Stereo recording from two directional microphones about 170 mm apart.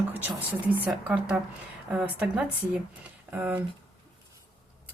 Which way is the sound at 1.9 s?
10° right (ahead or behind).